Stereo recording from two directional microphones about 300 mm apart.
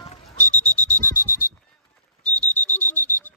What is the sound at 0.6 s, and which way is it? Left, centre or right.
Smoke detector, left.